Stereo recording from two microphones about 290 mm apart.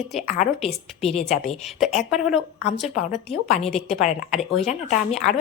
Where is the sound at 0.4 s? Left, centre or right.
Left.